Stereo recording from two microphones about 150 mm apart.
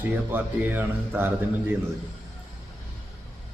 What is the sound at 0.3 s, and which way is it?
A man's voice, 15° right (ahead or behind).